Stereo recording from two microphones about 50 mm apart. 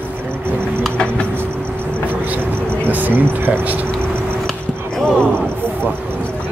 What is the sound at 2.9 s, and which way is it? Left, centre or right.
Speech, right.